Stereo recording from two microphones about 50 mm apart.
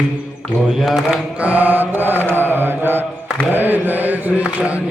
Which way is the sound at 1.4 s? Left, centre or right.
Right.